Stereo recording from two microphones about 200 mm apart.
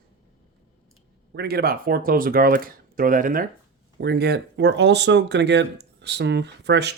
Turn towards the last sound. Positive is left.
turn(degrees=-60)  # may be behind; listen again after turning